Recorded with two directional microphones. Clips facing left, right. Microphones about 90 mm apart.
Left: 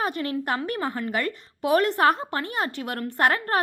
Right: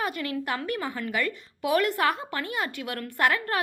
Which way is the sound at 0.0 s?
35° left (ahead or behind).